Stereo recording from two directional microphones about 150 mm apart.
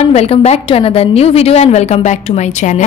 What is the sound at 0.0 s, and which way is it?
A woman's voice, 45° left (ahead or behind).